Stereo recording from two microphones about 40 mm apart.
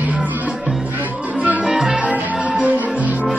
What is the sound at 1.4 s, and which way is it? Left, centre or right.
Music, right.